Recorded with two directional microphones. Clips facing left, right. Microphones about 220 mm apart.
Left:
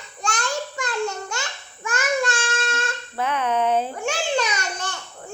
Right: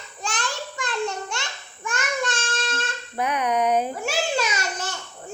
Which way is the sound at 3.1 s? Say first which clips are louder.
Even; 15° right (ahead or behind).